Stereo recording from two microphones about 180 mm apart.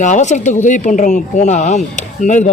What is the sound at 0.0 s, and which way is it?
Speech, 40° left (ahead or behind).